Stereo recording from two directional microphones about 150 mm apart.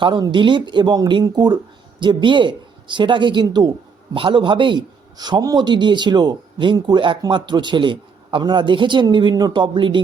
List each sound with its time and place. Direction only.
0.0 s speech: 30° right (ahead or behind)